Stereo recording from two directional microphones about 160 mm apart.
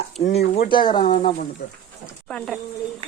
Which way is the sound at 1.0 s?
50° left (ahead or behind).